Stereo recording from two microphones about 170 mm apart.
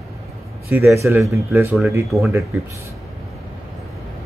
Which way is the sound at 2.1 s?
Centre (ahead or behind).